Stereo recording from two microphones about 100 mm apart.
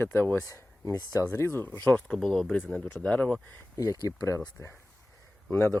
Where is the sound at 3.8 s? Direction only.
35° left (ahead or behind).